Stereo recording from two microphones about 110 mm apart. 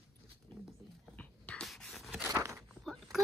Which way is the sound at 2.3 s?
25° right (ahead or behind).